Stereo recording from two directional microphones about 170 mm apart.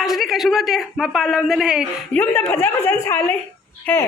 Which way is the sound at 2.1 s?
10° left (ahead or behind).